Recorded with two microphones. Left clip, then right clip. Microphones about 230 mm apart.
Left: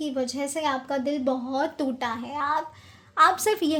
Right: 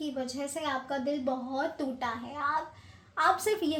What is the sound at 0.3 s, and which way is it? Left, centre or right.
A woman's voice, left.